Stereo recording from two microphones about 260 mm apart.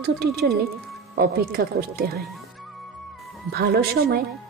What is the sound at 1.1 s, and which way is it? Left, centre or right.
Speech, right.